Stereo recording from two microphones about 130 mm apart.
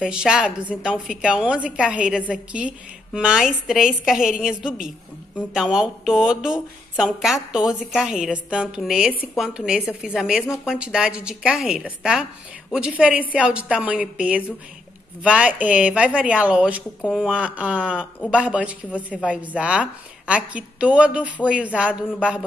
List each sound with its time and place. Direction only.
0.0 s a woman's voice: 5° right (ahead or behind)
10.4 s speech: 20° left (ahead or behind)
10.7 s a woman's voice: 5° right (ahead or behind)